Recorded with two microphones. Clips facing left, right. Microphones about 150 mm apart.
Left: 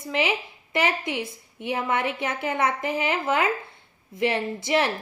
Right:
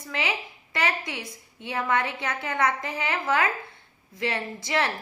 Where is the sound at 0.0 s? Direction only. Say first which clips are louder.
Left 5 dB; 25° left (ahead or behind).